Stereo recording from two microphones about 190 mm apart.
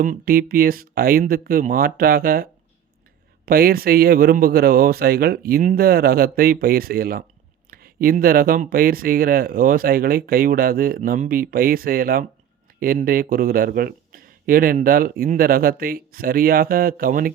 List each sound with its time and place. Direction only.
0.0 s speech: 45° right (ahead or behind)